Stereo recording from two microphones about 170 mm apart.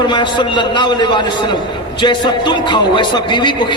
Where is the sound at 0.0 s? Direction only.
25° left (ahead or behind).